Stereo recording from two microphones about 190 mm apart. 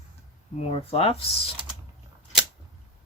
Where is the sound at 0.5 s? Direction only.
30° left (ahead or behind).